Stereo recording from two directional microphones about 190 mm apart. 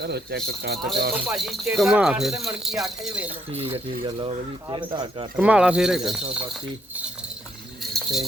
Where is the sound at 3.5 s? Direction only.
30° right (ahead or behind).